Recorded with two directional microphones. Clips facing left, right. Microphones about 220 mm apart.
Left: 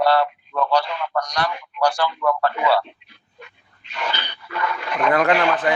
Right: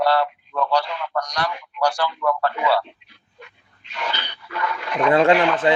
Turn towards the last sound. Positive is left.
turn(degrees=-25)  # may be behind; listen again after turning